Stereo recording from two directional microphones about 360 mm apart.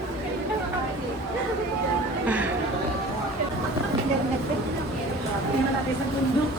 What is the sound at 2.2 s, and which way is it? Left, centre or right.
Chatter, centre.